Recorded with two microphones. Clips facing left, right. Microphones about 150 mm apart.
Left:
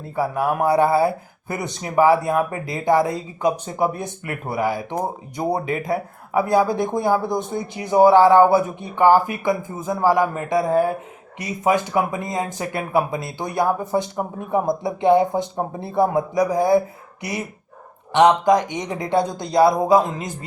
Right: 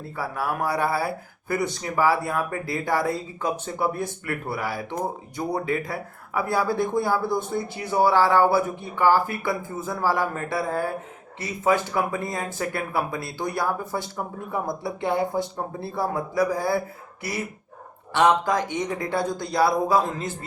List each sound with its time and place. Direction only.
0.2 s speech: 20° left (ahead or behind)